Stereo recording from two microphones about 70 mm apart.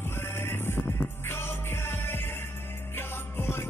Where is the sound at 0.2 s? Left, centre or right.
Left.